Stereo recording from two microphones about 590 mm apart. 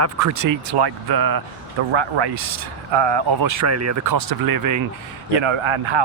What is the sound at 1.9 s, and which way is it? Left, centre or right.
Speech, right.